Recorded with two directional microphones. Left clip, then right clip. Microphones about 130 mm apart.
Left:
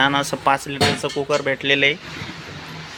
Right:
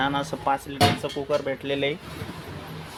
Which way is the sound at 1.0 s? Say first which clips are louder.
Left 5 dB; 20° left (ahead or behind).